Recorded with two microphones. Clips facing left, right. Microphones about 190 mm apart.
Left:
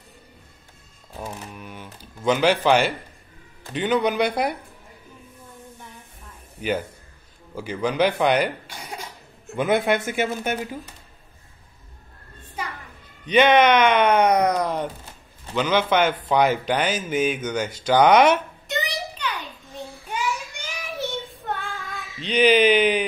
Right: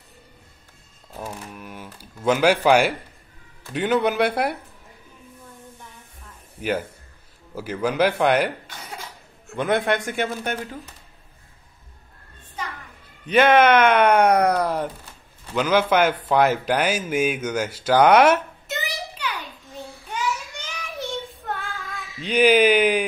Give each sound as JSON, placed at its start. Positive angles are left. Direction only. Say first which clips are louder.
{"t": 1.1, "sound": "speech", "louder": "even", "side_deg": -5}
{"t": 7.5, "sound": "speech", "louder": "even", "side_deg": -5}
{"t": 8.6, "sound": "cough", "louder": "left 2 dB", "side_deg": 15}
{"t": 9.6, "sound": "speech", "louder": "left 1 dB", "side_deg": 0}
{"t": 12.6, "sound": "a sound", "louder": "left 1 dB", "side_deg": 10}
{"t": 13.2, "sound": "speech", "louder": "even", "side_deg": -5}
{"t": 20.5, "sound": "child singing", "louder": "left 1 dB", "side_deg": 10}
{"t": 22.2, "sound": "speech", "louder": "right 1 dB", "side_deg": -10}